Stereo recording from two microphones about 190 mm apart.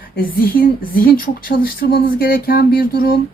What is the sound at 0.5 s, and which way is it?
Speech, 50° left (ahead or behind).